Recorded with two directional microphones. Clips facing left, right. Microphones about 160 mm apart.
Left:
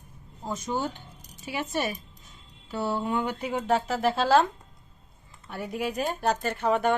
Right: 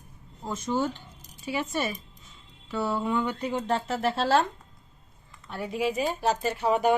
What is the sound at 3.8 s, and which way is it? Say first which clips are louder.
Speech: left 2 dB; centre (ahead or behind).